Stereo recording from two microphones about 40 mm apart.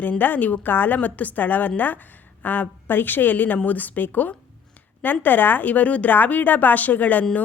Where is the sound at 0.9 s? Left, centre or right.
Left.